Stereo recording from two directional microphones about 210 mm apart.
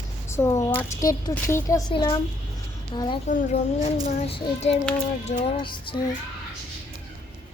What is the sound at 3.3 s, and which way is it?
Speech, 35° left (ahead or behind).